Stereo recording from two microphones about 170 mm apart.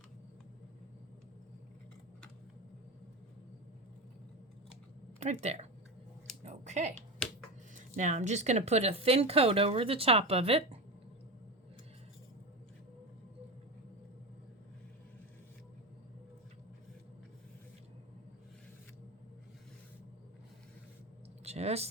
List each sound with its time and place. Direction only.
5.2 s speech: 40° right (ahead or behind)
6.4 s finger snapping: 45° right (ahead or behind)
7.9 s speech: 45° right (ahead or behind)
21.4 s a sound: 40° right (ahead or behind)